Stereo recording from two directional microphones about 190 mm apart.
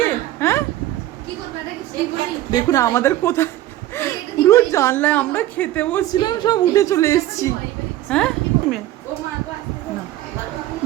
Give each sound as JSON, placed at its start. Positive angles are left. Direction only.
{"t": 0.0, "sound": "vehicle", "side_deg": 10}
{"t": 2.5, "sound": "a woman's voice", "side_deg": 20}
{"t": 6.1, "sound": "a woman's voice", "side_deg": 20}
{"t": 8.1, "sound": "a sound", "side_deg": 5}